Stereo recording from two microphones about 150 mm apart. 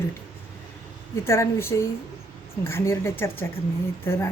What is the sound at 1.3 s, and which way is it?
Speech, 15° left (ahead or behind).